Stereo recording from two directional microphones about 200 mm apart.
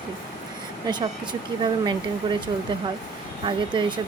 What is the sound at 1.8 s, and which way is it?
Speech, 25° right (ahead or behind).